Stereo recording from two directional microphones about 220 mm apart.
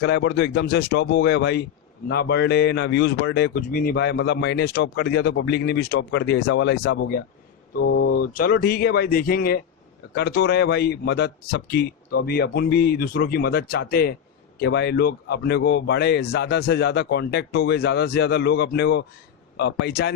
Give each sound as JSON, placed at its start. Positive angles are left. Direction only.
{"t": 0.0, "sound": "a man's voice", "side_deg": 50}
{"t": 8.3, "sound": "a man's voice", "side_deg": 40}